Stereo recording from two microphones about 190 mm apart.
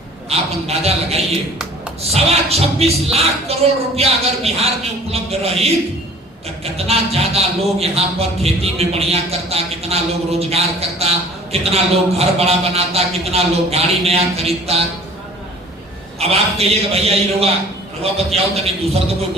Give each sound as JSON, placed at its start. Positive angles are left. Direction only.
{"t": 0.3, "sound": "a woman's voice", "side_deg": -35}
{"t": 6.7, "sound": "a woman's voice", "side_deg": -30}
{"t": 16.2, "sound": "a woman's voice", "side_deg": -30}